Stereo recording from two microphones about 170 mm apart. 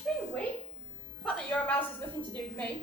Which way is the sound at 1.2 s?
10° left (ahead or behind).